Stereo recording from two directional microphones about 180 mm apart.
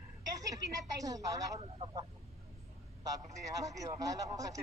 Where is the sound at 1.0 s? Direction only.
20° right (ahead or behind).